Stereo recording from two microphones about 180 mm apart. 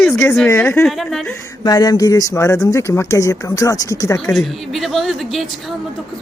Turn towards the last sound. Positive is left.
turn(degrees=0)  # may be behind; listen again after turning